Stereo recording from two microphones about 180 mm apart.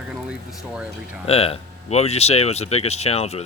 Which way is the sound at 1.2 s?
35° left (ahead or behind).